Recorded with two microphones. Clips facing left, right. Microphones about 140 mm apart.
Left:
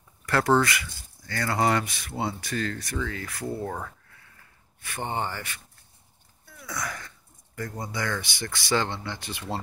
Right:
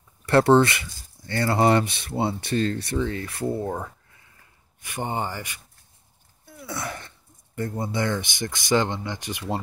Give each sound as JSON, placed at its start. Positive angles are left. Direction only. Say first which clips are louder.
{"t": 0.3, "sound": "speech", "louder": "right 5 dB", "side_deg": -25}
{"t": 6.4, "sound": "speech", "louder": "right 2 dB", "side_deg": -25}